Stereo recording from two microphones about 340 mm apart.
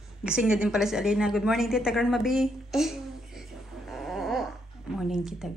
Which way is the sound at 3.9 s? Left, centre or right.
Centre.